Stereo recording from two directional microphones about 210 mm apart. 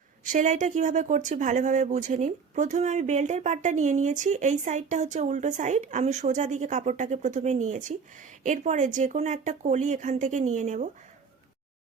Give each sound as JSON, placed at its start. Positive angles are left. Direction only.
{"t": 0.3, "sound": "speech", "side_deg": -35}